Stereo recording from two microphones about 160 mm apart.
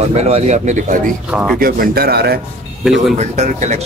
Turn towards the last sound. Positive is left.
turn(degrees=-45)  # may be behind; listen again after turning